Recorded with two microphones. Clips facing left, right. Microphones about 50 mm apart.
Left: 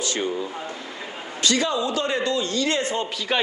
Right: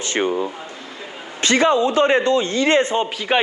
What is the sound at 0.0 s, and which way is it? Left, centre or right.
Speech, right.